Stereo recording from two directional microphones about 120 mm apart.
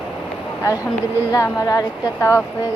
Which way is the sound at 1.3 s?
25° left (ahead or behind).